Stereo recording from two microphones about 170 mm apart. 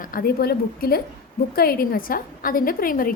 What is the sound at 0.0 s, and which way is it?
A woman's voice, 60° left (ahead or behind).